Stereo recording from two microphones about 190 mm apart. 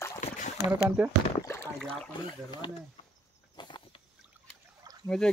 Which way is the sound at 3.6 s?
25° left (ahead or behind).